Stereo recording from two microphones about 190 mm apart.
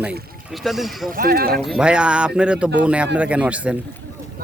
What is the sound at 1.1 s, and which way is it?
Speech, 50° right (ahead or behind).